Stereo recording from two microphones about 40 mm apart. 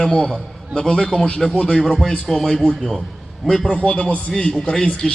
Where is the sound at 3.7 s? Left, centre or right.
Left.